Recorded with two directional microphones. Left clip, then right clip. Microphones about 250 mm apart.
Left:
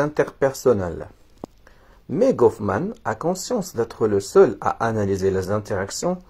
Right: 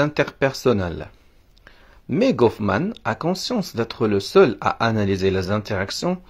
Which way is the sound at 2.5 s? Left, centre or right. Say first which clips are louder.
Right 2 dB; right.